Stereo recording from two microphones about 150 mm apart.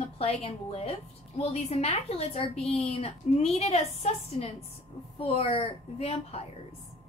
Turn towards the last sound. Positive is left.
turn(degrees=40)  # may be behind; listen again after turning